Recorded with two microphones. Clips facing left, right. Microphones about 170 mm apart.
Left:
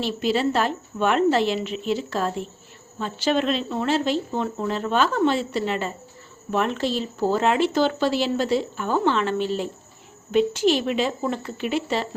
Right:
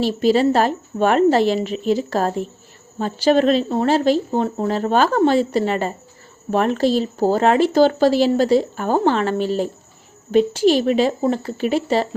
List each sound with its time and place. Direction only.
0.0 s speech: 40° right (ahead or behind)